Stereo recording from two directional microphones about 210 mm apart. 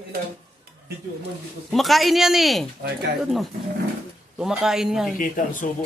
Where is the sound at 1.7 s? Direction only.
Centre (ahead or behind).